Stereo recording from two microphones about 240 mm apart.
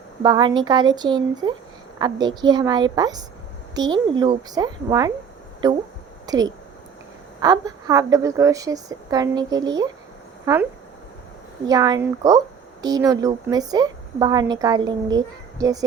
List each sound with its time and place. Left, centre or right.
0.2 s speech: centre